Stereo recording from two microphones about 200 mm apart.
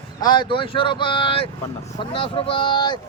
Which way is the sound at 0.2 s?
25° left (ahead or behind).